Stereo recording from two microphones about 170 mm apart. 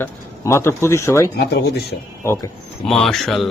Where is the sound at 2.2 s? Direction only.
15° left (ahead or behind).